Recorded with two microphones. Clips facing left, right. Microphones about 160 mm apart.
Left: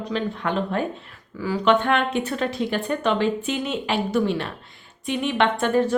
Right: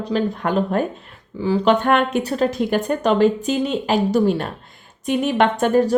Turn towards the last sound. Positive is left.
turn(degrees=-40)  # may be behind; listen again after turning